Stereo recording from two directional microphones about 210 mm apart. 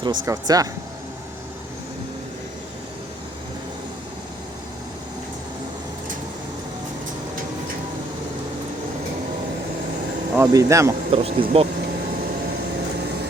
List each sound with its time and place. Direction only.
0.0 s speech: 20° right (ahead or behind)
10.3 s speech: 15° right (ahead or behind)
11.1 s speech: 25° right (ahead or behind)